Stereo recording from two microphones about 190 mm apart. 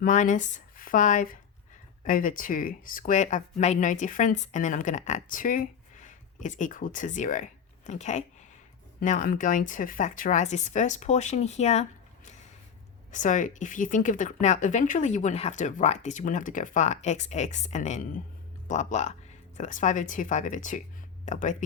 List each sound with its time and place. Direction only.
0.0 s speech: 40° left (ahead or behind)
13.1 s speech: 40° left (ahead or behind)